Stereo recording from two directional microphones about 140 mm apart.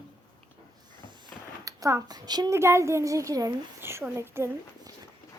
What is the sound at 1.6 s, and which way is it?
A child's voice, 25° right (ahead or behind).